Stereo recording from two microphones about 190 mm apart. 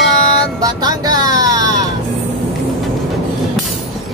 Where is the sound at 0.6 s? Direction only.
20° right (ahead or behind).